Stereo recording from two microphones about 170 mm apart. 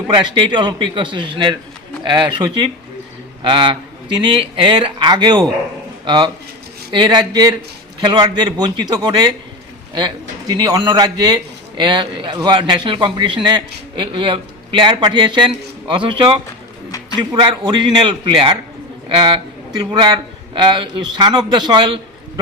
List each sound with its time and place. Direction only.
0.1 s a man's voice: 25° right (ahead or behind)
3.4 s a man's voice: 30° right (ahead or behind)
10.5 s a man's voice: 20° right (ahead or behind)